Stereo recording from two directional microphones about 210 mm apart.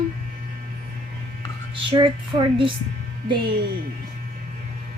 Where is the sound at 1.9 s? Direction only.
25° right (ahead or behind).